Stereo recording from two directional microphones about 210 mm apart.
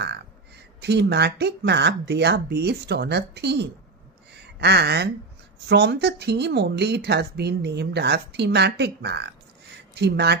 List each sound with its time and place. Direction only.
0.7 s speech: 55° right (ahead or behind)
4.3 s a sound: 50° right (ahead or behind)
5.7 s speech: 50° right (ahead or behind)